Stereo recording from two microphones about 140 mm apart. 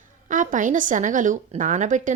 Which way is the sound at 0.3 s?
70° right (ahead or behind).